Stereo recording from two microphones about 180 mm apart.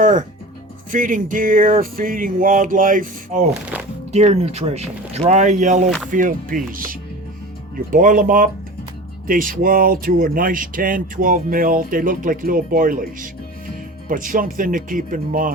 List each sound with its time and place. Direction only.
0.0 s speech: 45° right (ahead or behind)
4.1 s speech: 35° right (ahead or behind)
7.9 s speech: 45° right (ahead or behind)
14.1 s speech: 50° right (ahead or behind)